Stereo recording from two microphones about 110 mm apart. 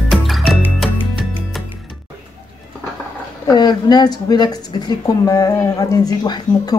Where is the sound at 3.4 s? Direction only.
40° left (ahead or behind).